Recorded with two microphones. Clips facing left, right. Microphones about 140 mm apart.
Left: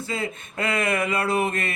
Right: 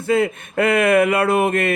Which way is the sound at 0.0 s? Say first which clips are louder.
Right 11 dB; 60° right (ahead or behind).